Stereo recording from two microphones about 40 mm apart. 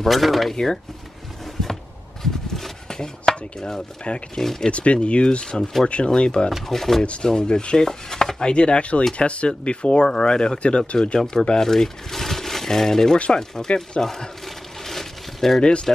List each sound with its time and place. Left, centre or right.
0.0 s speech: centre
2.5 s a sound: centre
4.1 s chopping: left
4.4 s speech: centre
4.6 s chopping: left
5.6 s speech: centre
5.9 s chopping: left
6.7 s speech: centre
7.2 s chopping: centre
11.6 s speech: centre
14.9 s a sound: centre
15.6 s chopping: left